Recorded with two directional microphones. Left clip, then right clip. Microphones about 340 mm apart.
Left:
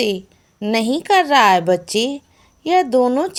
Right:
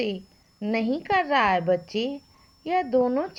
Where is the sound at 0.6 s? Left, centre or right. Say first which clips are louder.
Left 8 dB; right.